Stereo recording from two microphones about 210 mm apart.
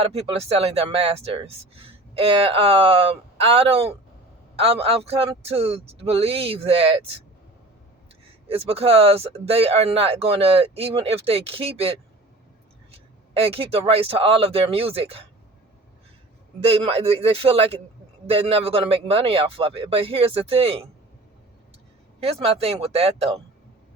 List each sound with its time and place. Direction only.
0.0 s speech: 30° right (ahead or behind)
8.4 s speech: 25° right (ahead or behind)
13.3 s speech: 25° right (ahead or behind)
16.6 s speech: 30° right (ahead or behind)
22.2 s speech: 30° right (ahead or behind)